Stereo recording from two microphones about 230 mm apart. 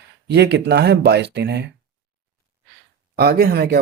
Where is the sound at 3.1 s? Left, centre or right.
Right.